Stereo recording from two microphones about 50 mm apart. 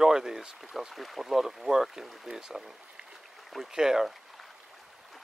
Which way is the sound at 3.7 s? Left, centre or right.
Centre.